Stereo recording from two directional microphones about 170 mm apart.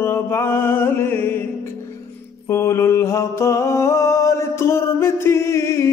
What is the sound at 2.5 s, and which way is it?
Mantra, 15° left (ahead or behind).